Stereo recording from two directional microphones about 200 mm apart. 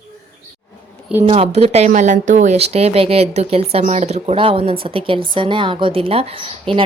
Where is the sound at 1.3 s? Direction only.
30° right (ahead or behind).